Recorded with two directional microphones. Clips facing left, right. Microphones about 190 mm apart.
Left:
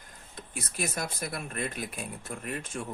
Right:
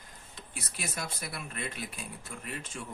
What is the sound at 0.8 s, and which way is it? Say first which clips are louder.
Speech: left 5 dB; 45° left (ahead or behind).